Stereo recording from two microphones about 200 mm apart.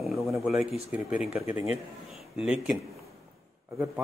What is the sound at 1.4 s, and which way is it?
Speech, 30° left (ahead or behind).